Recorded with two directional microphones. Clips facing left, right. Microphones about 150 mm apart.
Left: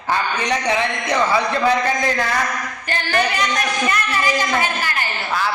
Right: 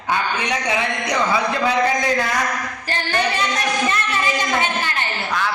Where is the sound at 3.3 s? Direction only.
25° right (ahead or behind).